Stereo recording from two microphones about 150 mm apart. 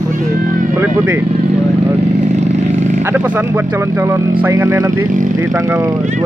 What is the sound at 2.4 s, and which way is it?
Vehicle, 50° right (ahead or behind).